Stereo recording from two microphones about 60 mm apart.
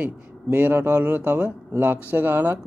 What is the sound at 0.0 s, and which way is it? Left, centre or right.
Speech, right.